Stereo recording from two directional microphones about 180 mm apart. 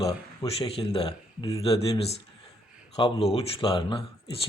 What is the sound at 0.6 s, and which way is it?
Speech, 30° left (ahead or behind).